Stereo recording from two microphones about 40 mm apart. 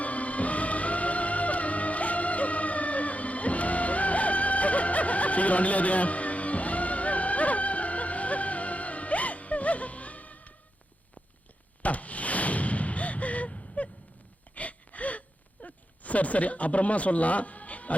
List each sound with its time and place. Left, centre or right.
0.0 s music: left
11.8 s gasp: left
15.6 s a sound: left